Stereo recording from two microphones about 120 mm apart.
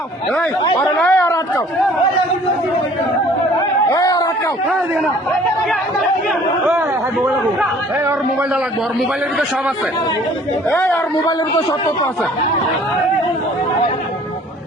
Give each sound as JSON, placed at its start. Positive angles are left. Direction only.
{"t": 0.8, "sound": "chatter", "side_deg": 15}
{"t": 3.9, "sound": "a sound", "side_deg": 30}
{"t": 10.7, "sound": "speech", "side_deg": 15}